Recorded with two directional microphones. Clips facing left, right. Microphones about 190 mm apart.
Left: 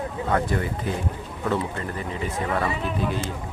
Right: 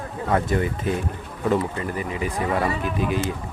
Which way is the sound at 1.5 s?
10° right (ahead or behind).